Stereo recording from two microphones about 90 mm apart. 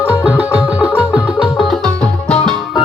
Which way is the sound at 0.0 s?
15° right (ahead or behind).